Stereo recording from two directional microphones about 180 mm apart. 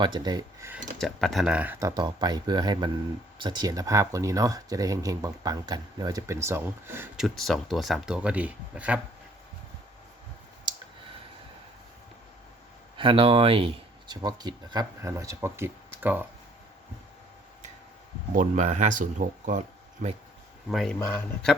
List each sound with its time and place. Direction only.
0.0 s speech: 25° right (ahead or behind)
0.9 s speech: centre (ahead or behind)
2.0 s speech: 25° right (ahead or behind)
7.3 s speech: centre (ahead or behind)
13.0 s speech: 30° right (ahead or behind); by 16.2 s 10° right (ahead or behind)
18.3 s speech: 40° right (ahead or behind)
20.7 s speech: centre (ahead or behind)